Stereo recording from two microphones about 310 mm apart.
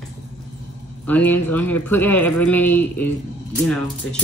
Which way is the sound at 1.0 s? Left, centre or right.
Centre.